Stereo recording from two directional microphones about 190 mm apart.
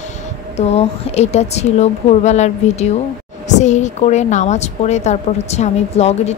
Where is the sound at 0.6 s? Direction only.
35° left (ahead or behind).